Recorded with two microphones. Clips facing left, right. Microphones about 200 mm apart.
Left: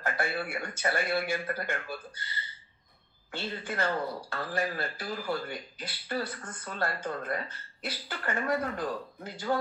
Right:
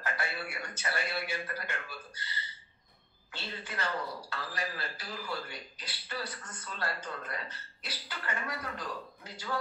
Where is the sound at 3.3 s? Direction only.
50° left (ahead or behind).